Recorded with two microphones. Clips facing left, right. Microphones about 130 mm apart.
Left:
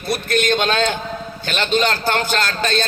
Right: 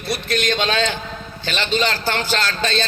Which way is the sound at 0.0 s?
50° left (ahead or behind).